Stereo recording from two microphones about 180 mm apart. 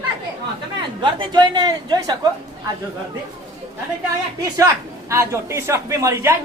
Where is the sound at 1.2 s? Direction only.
25° right (ahead or behind).